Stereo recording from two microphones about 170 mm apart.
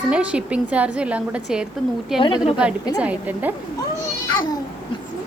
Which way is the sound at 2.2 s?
30° left (ahead or behind).